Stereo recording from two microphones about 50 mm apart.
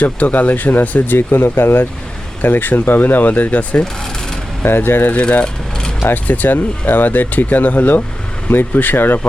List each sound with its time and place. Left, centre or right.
0.0 s speech: left
4.6 s speech: left
5.1 s speech: left